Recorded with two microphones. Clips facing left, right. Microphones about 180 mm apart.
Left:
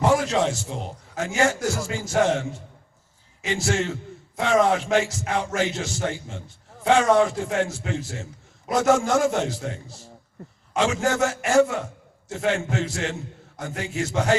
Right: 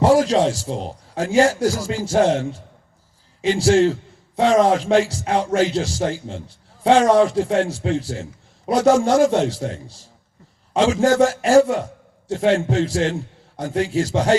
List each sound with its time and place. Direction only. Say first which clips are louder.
0.0 s a man's voice: right 6 dB; 35° right (ahead or behind)